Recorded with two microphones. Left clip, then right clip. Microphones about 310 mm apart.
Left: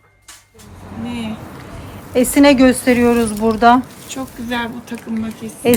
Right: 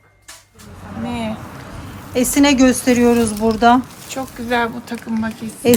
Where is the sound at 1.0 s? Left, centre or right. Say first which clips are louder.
Right 2 dB; right.